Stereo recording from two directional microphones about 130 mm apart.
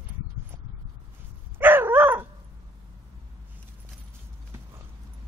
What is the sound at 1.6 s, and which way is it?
Dog, 15° right (ahead or behind).